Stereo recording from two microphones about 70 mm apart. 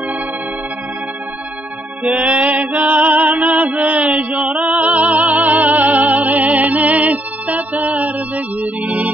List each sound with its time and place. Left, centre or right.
2.0 s mantra: right